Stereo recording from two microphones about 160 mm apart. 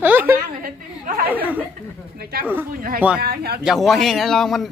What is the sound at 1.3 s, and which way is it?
Speech, 10° right (ahead or behind).